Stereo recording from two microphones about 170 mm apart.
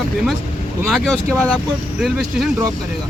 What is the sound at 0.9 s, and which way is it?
Speech, centre (ahead or behind).